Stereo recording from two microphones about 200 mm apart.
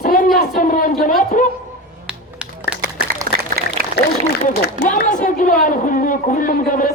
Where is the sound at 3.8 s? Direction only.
50° right (ahead or behind).